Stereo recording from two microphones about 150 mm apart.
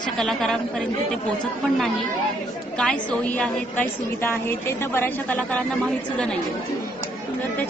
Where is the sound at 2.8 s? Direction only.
5° left (ahead or behind).